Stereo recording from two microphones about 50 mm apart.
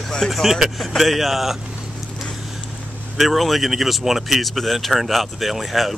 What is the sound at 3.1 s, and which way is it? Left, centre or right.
Speech, centre.